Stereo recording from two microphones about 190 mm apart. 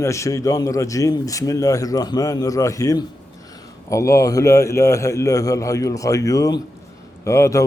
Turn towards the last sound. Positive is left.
turn(degrees=15)  # may be behind; listen again after turning